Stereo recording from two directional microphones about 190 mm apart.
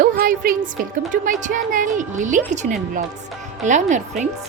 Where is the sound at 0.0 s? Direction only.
50° right (ahead or behind).